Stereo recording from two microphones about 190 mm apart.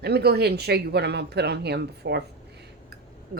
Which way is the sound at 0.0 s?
55° right (ahead or behind).